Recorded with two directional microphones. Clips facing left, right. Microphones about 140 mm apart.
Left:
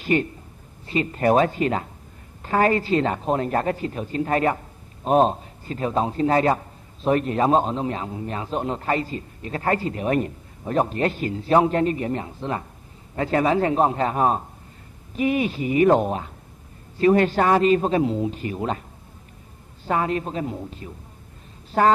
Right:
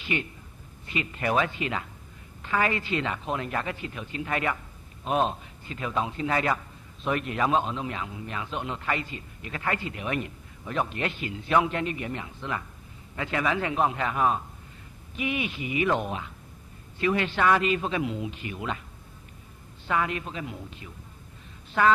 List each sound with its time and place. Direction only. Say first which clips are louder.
0.0 s a man's voice: left 9 dB; 40° left (ahead or behind)